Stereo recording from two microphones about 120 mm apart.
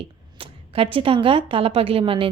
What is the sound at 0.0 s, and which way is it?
A woman's voice, 50° right (ahead or behind).